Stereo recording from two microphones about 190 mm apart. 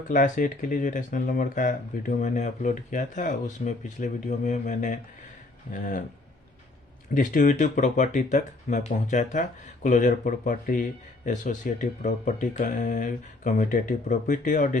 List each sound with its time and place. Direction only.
0.1 s speech: 45° left (ahead or behind)
7.1 s speech: 45° left (ahead or behind)